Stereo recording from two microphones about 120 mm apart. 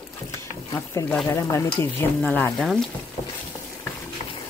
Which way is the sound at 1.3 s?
25° left (ahead or behind).